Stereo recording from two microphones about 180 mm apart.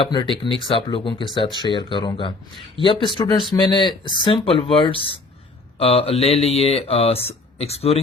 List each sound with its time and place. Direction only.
0.0 s speech: 25° left (ahead or behind)